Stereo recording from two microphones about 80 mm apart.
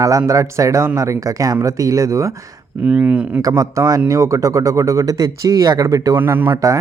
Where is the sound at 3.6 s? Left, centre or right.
Right.